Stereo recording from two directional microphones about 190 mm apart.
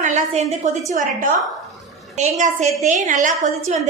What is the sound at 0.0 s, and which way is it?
Speech, 40° right (ahead or behind).